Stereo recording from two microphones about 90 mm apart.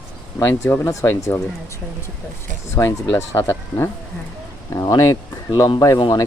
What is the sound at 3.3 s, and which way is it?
Speech, 25° left (ahead or behind).